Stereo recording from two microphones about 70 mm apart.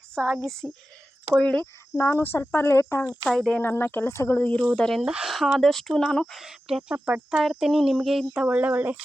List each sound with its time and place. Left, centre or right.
0.2 s speech: centre
1.4 s speech: centre
2.0 s cricket: left
2.2 s speech: left
3.2 s speech: centre
3.6 s speech: left
4.7 s speech: centre
5.0 s speech: centre
5.3 s speech: centre
6.4 s speech: centre
6.9 s speech: right
7.3 s speech: centre
8.4 s speech: centre